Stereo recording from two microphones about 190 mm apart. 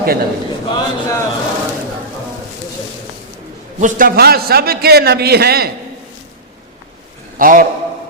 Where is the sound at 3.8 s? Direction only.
45° right (ahead or behind).